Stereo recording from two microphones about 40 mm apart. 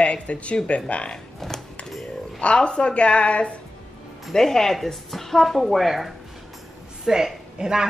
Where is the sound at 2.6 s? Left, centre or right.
Left.